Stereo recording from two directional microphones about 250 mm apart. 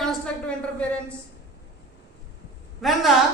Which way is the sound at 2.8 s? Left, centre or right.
Centre.